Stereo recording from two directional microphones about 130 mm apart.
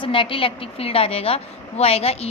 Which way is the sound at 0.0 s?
40° left (ahead or behind).